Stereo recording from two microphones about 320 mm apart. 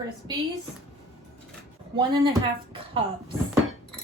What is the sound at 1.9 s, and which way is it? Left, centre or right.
A woman's voice, centre.